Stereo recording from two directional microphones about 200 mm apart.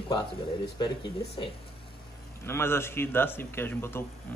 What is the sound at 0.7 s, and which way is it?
Speech, 20° left (ahead or behind).